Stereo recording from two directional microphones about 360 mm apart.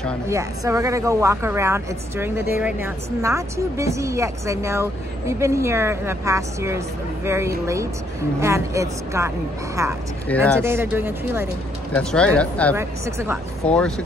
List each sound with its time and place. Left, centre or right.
0.0 s speech: centre
10.2 s speech: centre
10.6 s speech: centre
12.7 s speech: centre